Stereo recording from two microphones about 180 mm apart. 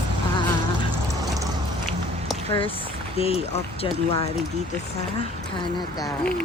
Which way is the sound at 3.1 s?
35° left (ahead or behind).